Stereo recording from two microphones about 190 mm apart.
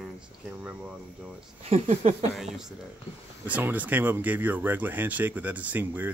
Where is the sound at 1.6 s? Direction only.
35° right (ahead or behind).